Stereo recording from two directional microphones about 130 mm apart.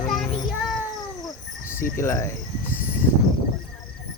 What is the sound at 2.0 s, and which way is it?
Speech, 20° left (ahead or behind).